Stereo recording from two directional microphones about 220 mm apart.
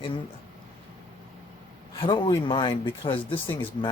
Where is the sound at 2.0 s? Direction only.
20° left (ahead or behind).